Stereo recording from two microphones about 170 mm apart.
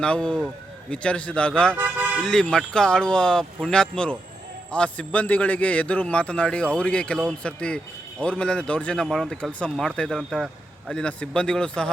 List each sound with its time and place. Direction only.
0.0 s a man's voice: 5° left (ahead or behind)
1.7 s vehicle: 10° right (ahead or behind)
2.2 s a man's voice: 5° left (ahead or behind)